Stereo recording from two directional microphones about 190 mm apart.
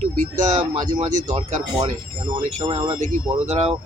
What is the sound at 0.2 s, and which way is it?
Speech, 40° right (ahead or behind).